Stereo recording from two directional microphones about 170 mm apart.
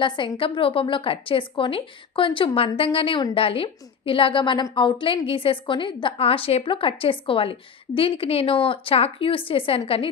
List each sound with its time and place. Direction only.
0.0 s a woman's voice: 30° left (ahead or behind)